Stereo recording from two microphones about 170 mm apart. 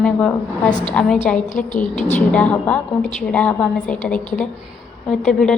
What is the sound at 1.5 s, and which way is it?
Speech, 50° left (ahead or behind).